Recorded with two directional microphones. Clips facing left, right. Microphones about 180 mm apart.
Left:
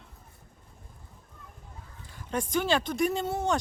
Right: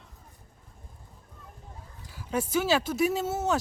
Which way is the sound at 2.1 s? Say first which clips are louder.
Right 2 dB; 5° right (ahead or behind).